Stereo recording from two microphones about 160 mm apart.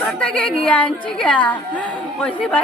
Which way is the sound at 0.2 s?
5° left (ahead or behind).